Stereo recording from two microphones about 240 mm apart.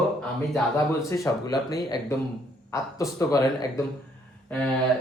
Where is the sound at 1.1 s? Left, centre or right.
Centre.